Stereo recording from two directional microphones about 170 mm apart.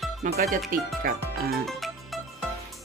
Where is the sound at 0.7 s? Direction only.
60° right (ahead or behind).